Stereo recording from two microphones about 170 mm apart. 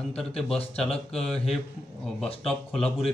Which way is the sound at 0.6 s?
35° left (ahead or behind).